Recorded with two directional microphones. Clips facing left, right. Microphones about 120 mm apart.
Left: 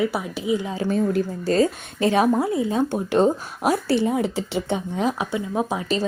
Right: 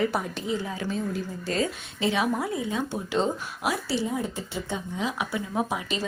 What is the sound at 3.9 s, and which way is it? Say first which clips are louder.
Speech: left 7 dB; 65° left (ahead or behind).